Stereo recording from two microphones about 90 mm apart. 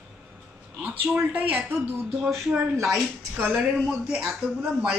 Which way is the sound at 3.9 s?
10° right (ahead or behind).